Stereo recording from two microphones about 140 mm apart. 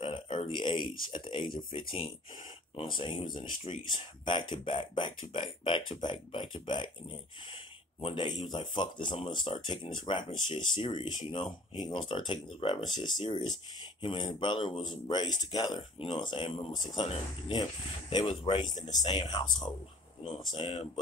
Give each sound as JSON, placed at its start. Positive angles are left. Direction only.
{"t": 0.0, "sound": "speech", "side_deg": 35}